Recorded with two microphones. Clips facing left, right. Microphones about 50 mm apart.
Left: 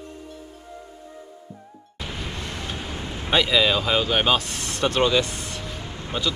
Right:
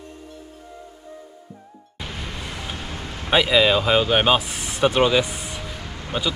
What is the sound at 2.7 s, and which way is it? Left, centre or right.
Vehicle, left.